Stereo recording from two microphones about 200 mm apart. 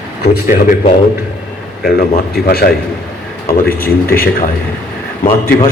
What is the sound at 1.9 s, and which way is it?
A man's voice, 50° left (ahead or behind).